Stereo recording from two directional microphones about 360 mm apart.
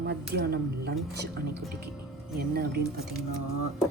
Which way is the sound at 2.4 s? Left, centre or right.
Right.